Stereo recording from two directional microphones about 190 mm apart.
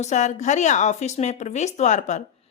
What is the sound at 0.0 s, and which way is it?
A woman's voice, 40° left (ahead or behind).